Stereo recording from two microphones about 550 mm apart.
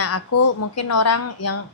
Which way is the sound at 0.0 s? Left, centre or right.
Left.